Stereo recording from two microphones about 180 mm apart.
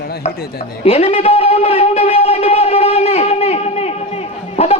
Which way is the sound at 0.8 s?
35° left (ahead or behind).